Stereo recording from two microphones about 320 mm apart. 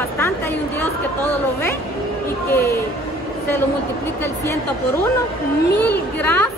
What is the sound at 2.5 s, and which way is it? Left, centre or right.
Speech, centre.